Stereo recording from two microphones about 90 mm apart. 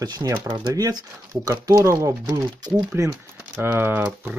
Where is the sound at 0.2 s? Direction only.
60° right (ahead or behind).